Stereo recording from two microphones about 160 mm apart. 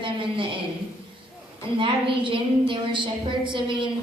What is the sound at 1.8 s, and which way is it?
A woman's voice, 30° right (ahead or behind).